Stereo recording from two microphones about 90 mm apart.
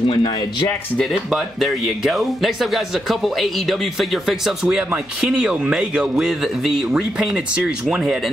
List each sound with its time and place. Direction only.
0.0 s speech: 70° left (ahead or behind)
0.9 s speech: centre (ahead or behind)